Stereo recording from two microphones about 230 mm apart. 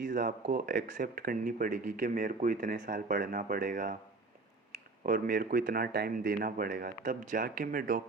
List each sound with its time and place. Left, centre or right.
0.0 s a sound: right
0.4 s speech: right
5.0 s speech: right